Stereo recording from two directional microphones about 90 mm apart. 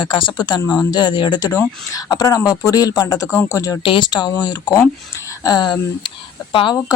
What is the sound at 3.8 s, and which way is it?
Speech, 60° left (ahead or behind).